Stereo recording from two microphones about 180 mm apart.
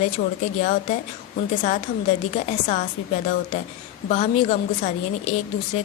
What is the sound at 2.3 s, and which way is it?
A woman's voice, 40° left (ahead or behind).